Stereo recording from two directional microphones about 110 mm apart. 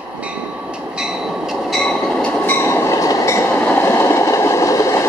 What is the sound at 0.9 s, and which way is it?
Train, 5° right (ahead or behind).